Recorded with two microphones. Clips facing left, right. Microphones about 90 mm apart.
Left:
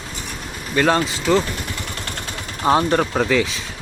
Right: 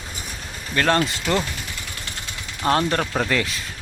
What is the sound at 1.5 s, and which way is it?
Vehicle, 60° left (ahead or behind).